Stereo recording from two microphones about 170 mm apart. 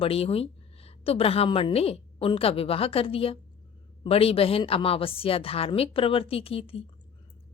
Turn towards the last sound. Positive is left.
turn(degrees=35)  # may be behind; listen again after turning